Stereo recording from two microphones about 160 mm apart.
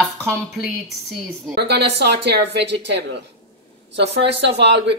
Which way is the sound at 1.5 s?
90° right.